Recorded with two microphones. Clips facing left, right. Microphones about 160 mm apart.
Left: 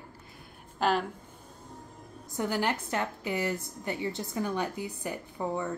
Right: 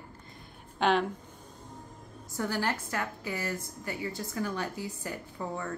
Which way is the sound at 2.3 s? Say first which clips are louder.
Left 2 dB; 20° left (ahead or behind).